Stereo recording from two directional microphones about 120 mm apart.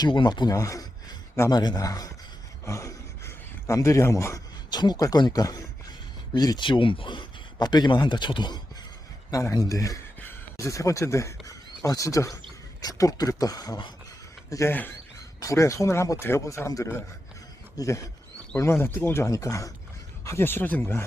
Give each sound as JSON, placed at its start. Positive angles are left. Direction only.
{"t": 0.0, "sound": "a man's voice", "side_deg": 40}
{"t": 2.6, "sound": "a sound", "side_deg": 25}
{"t": 4.7, "sound": "a man's voice", "side_deg": 35}
{"t": 10.2, "sound": "speech", "side_deg": 15}
{"t": 11.4, "sound": "wild animals", "side_deg": 30}
{"t": 12.8, "sound": "speech", "side_deg": 30}
{"t": 14.5, "sound": "speech", "side_deg": 20}